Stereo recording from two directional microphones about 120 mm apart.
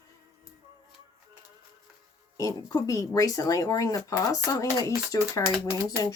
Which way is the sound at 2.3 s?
30° left (ahead or behind).